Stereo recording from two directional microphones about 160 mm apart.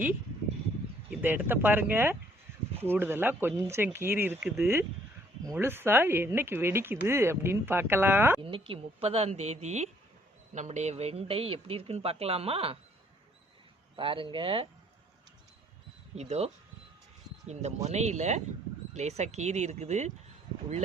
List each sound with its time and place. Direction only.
1.2 s speech: 10° right (ahead or behind)
8.4 s speech: 30° right (ahead or behind)
13.9 s speech: 30° right (ahead or behind)
16.1 s speech: 40° right (ahead or behind)